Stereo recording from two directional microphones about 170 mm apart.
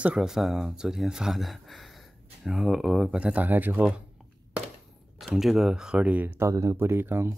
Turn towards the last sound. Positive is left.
turn(degrees=-15)  # may be behind; listen again after turning